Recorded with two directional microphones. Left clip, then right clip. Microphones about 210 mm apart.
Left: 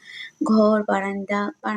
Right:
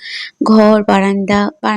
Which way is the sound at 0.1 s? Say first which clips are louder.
Right 10 dB; 40° right (ahead or behind).